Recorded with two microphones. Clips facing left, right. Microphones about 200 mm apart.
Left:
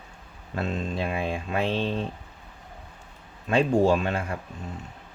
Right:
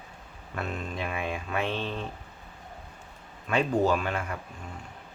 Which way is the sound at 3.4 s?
25° left (ahead or behind).